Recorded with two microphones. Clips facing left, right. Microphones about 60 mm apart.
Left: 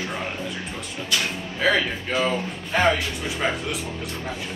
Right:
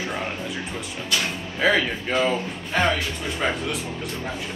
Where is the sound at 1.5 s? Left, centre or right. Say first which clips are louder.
Right 1 dB; centre.